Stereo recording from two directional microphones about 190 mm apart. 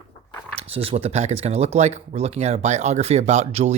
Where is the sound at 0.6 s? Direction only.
30° right (ahead or behind).